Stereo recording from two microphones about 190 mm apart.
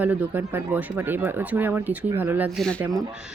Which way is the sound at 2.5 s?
5° left (ahead or behind).